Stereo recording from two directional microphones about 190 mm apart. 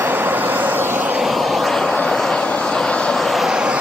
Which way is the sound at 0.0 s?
10° right (ahead or behind).